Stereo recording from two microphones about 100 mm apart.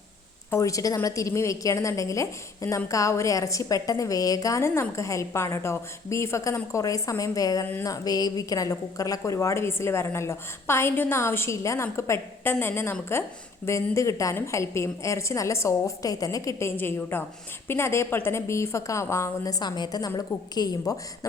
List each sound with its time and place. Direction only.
0.5 s a woman's voice: 35° left (ahead or behind)
19.5 s a woman's voice: 45° left (ahead or behind)